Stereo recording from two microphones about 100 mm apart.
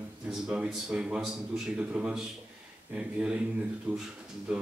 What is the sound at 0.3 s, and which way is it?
A man's voice, 5° right (ahead or behind).